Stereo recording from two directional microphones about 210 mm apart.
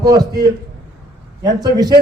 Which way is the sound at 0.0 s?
20° right (ahead or behind).